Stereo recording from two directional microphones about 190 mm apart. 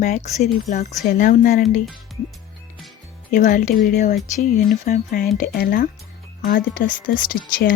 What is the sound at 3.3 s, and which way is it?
A woman's voice, 40° left (ahead or behind).